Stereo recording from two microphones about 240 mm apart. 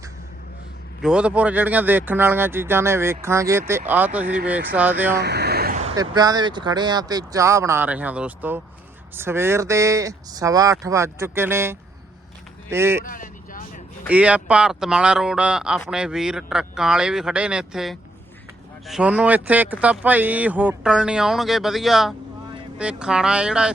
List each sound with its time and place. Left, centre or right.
1.0 s speech: centre
5.1 s vehicle: right
6.0 s speech: centre
13.1 s vehicle: left
14.1 s speech: centre